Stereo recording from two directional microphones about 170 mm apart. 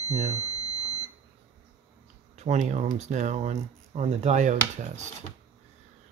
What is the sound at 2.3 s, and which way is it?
Speech, 40° right (ahead or behind).